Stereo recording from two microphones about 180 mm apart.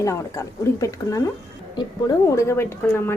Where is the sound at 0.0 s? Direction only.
15° left (ahead or behind).